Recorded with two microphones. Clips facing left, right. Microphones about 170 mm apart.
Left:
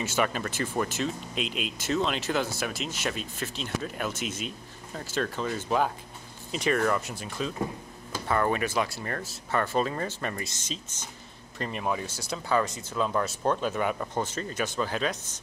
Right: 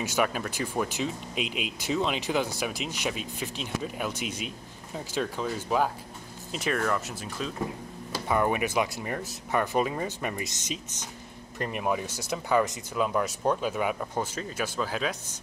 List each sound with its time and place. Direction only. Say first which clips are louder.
0.0 s speech: even; 10° right (ahead or behind)
8.3 s speech: even; 15° right (ahead or behind)